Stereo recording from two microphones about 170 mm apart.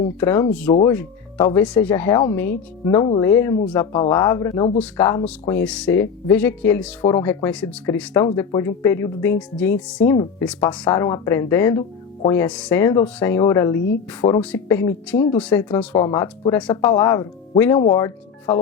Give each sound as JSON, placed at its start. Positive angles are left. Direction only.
{"t": 0.2, "sound": "speech", "side_deg": 15}
{"t": 1.6, "sound": "speech", "side_deg": 10}
{"t": 2.9, "sound": "speech", "side_deg": 25}
{"t": 7.0, "sound": "speech", "side_deg": 20}
{"t": 7.3, "sound": "speech", "side_deg": 10}
{"t": 10.8, "sound": "speech", "side_deg": 20}
{"t": 12.4, "sound": "speech", "side_deg": 5}
{"t": 14.5, "sound": "speech", "side_deg": 15}
{"t": 16.0, "sound": "speech", "side_deg": 20}
{"t": 16.5, "sound": "speech", "side_deg": 5}
{"t": 16.7, "sound": "speech", "side_deg": 20}